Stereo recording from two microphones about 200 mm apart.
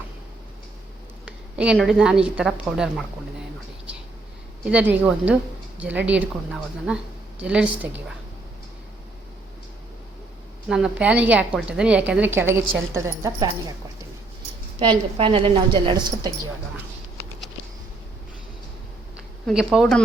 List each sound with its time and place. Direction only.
1.2 s a woman's voice: 5° right (ahead or behind)
4.6 s a woman's voice: 5° right (ahead or behind)
10.7 s a woman's voice: 5° right (ahead or behind)
14.8 s a woman's voice: 25° right (ahead or behind)
19.5 s speech: centre (ahead or behind)